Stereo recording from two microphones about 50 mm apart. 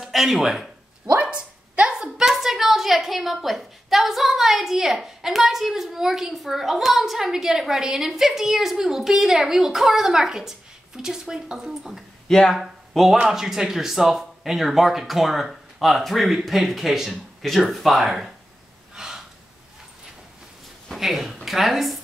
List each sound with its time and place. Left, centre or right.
0.0 s speech: centre
1.8 s a woman's voice: centre
12.3 s speech: centre
12.5 s speech: centre
18.9 s gasp: centre
20.9 s speech: centre